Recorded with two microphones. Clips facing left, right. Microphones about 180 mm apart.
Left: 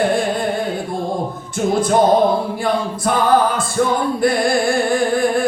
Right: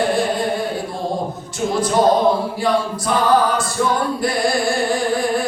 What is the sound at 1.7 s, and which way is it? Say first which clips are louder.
Music: left 2 dB; 55° left (ahead or behind).